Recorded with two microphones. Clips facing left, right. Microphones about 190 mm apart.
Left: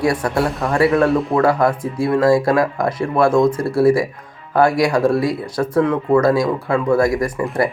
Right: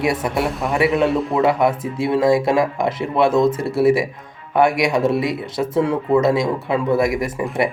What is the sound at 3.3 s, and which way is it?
Speech, 5° right (ahead or behind).